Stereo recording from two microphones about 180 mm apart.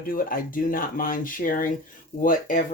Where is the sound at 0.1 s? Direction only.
55° left (ahead or behind).